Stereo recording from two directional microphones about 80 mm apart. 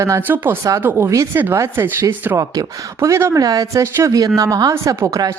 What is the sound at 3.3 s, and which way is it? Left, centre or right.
Speech, right.